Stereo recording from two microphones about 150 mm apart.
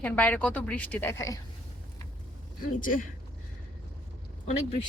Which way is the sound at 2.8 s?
65° left (ahead or behind).